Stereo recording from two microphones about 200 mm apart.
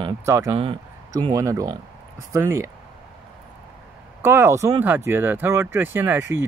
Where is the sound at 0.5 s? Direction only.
25° right (ahead or behind).